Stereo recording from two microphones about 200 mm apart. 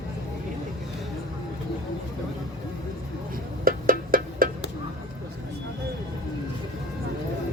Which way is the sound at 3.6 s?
45° right (ahead or behind).